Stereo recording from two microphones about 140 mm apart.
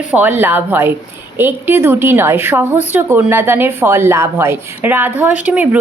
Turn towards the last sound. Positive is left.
turn(degrees=-10)  # may be behind; listen again after turning